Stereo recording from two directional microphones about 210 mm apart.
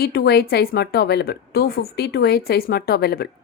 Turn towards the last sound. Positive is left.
turn(degrees=45)  # may be behind; listen again after turning